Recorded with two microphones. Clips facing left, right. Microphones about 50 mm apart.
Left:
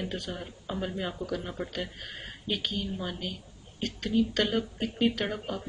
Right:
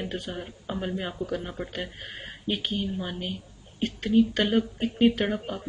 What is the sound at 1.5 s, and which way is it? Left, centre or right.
A woman's voice, centre.